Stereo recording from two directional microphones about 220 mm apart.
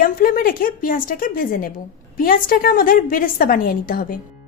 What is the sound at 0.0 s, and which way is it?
A woman's voice, 40° left (ahead or behind).